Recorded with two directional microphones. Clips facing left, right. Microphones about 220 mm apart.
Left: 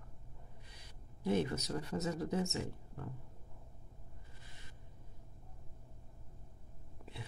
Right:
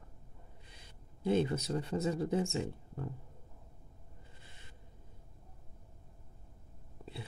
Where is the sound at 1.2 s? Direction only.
25° right (ahead or behind).